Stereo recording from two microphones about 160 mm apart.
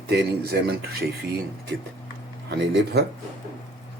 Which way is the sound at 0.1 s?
85° right.